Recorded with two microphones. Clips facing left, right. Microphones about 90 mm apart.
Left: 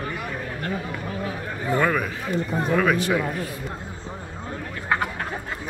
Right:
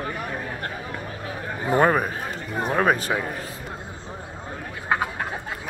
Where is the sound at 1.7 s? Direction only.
35° right (ahead or behind).